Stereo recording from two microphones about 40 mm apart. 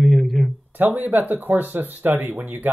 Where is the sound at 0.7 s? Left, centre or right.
Right.